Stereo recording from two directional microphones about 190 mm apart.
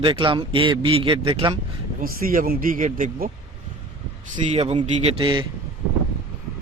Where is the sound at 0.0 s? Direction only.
25° right (ahead or behind).